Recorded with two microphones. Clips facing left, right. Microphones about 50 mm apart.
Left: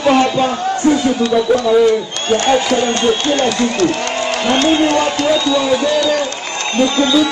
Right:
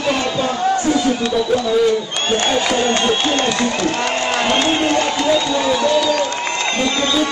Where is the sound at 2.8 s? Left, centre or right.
Centre.